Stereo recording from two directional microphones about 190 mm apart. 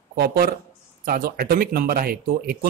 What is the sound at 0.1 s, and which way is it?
Speech, 55° right (ahead or behind).